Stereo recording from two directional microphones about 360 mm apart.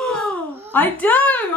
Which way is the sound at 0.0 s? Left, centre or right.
Centre.